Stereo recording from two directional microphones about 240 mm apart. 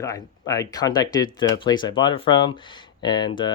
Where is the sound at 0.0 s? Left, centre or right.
Centre.